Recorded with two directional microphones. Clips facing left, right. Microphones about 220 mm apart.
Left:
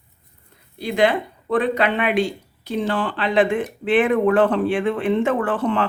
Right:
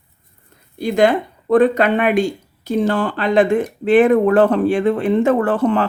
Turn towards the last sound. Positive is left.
turn(degrees=-40)  # may be behind; listen again after turning